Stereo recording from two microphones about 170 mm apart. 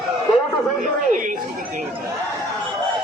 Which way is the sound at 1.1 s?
50° right (ahead or behind).